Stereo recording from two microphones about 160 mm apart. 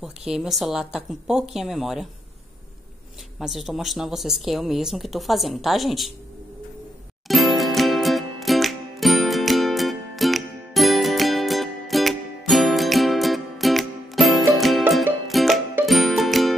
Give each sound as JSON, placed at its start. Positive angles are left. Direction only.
{"t": 0.0, "sound": "speech", "side_deg": -5}
{"t": 3.3, "sound": "speech", "side_deg": 0}
{"t": 7.2, "sound": "music", "side_deg": 0}